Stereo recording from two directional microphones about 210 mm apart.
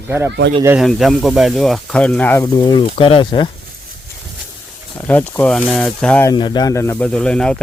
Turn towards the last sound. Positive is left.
turn(degrees=5)  # may be behind; listen again after turning